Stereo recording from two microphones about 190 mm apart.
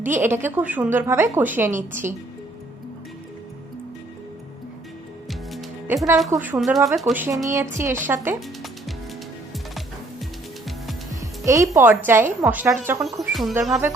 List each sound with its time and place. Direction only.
0.1 s a woman's voice: 10° right (ahead or behind)
5.3 s music: centre (ahead or behind)
6.3 s speech: 10° right (ahead or behind)
7.0 s a woman's voice: 10° right (ahead or behind)
11.1 s music: 15° right (ahead or behind)
12.0 s a woman's voice: 10° right (ahead or behind)
13.1 s speech: centre (ahead or behind)